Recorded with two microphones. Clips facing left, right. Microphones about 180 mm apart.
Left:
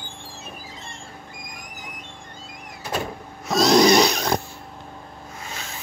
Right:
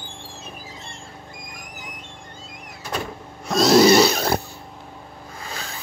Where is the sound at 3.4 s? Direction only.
Centre (ahead or behind).